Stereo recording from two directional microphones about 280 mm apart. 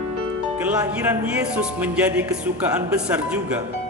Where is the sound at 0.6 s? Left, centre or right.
Centre.